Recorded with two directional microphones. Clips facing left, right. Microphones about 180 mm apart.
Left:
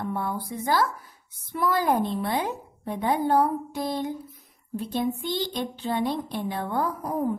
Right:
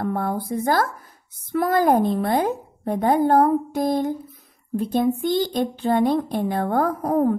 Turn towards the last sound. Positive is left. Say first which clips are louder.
# right 7 dB
turn(degrees=-55)  # may be behind; listen again after turning